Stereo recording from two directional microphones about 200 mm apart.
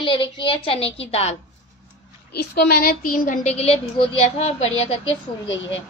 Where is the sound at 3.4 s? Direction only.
30° left (ahead or behind).